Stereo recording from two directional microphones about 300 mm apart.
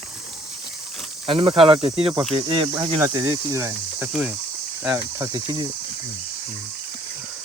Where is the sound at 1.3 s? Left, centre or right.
Centre.